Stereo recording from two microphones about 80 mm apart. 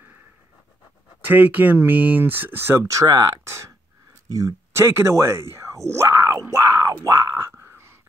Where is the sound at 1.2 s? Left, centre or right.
Right.